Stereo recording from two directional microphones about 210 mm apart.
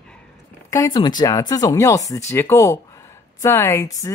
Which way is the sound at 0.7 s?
15° left (ahead or behind).